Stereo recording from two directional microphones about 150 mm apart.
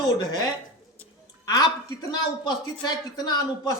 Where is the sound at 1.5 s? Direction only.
25° left (ahead or behind).